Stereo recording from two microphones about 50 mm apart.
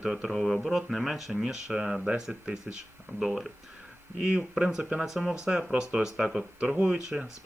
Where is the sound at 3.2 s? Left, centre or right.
Centre.